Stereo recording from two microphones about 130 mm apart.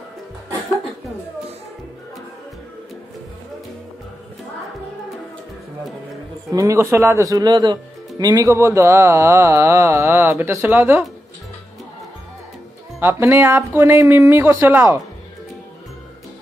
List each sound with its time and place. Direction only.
6.5 s speech: 25° right (ahead or behind)
13.0 s speech: 20° right (ahead or behind)